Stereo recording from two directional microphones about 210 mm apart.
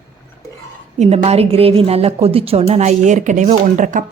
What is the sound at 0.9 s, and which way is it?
A woman's voice, 30° right (ahead or behind).